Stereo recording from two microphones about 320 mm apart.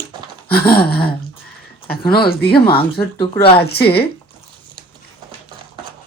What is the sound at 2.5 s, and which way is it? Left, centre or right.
Speech, centre.